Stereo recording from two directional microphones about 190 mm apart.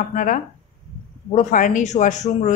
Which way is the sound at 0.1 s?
45° left (ahead or behind).